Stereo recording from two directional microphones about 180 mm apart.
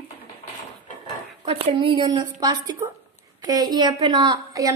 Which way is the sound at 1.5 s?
30° right (ahead or behind).